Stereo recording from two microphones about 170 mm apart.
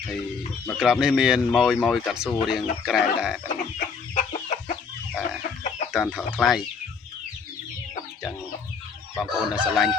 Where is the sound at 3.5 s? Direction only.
50° left (ahead or behind).